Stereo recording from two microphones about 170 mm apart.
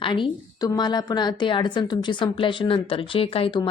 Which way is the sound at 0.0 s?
30° left (ahead or behind).